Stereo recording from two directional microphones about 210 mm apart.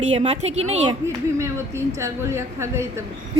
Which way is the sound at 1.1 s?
15° right (ahead or behind).